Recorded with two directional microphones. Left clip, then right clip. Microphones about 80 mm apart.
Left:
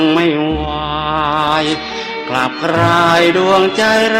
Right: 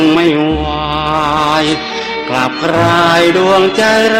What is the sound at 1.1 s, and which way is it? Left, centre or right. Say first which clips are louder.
Mantra: right 2 dB; right.